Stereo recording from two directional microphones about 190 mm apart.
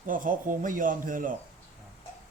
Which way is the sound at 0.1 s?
45° right (ahead or behind).